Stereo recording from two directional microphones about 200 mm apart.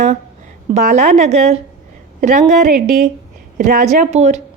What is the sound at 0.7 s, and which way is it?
A woman's voice, 35° right (ahead or behind).